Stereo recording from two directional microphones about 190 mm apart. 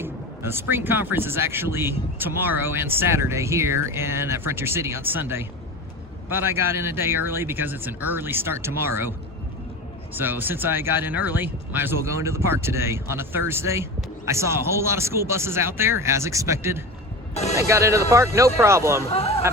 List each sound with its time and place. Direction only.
0.0 s speech: 10° right (ahead or behind)
10.2 s speech: 10° right (ahead or behind)
17.3 s speech: 35° left (ahead or behind)
17.6 s speech: 15° right (ahead or behind)